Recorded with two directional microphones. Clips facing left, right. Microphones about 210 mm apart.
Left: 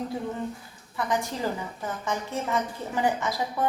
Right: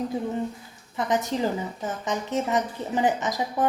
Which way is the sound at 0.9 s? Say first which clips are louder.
Right 3 dB; 20° right (ahead or behind).